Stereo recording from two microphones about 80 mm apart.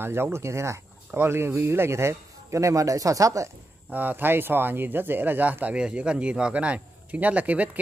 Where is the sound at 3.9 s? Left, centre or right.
Right.